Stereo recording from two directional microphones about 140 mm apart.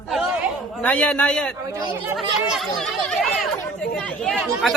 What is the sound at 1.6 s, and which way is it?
Speech, 20° right (ahead or behind).